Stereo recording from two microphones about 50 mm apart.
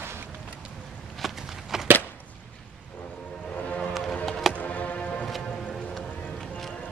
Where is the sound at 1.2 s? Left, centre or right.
Centre.